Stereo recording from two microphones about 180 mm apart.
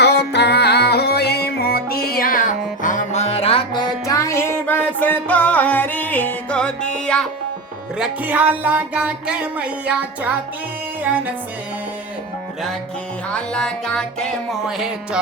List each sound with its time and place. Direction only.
0.0 s music: 65° left (ahead or behind); by 7.3 s 5° left (ahead or behind)
7.9 s music: 5° right (ahead or behind)
13.3 s music: 5° left (ahead or behind)